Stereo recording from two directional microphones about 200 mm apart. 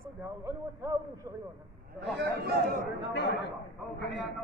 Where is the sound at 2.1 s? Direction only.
55° right (ahead or behind).